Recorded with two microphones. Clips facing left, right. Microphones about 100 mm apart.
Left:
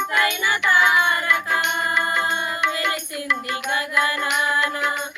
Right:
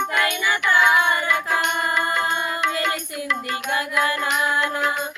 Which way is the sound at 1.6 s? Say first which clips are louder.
Right 1 dB; 45° right (ahead or behind).